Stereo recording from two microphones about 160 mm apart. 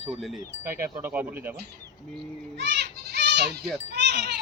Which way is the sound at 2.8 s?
90° right.